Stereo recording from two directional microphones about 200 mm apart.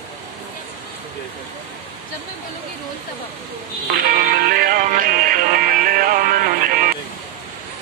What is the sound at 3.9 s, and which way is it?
Music, 50° right (ahead or behind).